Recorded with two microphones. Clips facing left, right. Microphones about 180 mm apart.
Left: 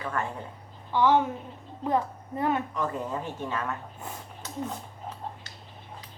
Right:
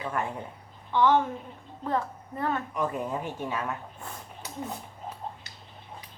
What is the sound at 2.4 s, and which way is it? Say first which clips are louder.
Speech: left 3 dB; 15° left (ahead or behind).